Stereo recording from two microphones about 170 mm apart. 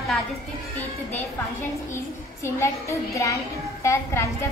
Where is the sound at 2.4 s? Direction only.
15° left (ahead or behind).